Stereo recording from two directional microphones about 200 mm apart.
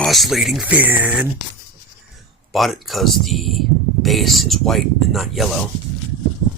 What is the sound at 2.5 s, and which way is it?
Speech, centre (ahead or behind).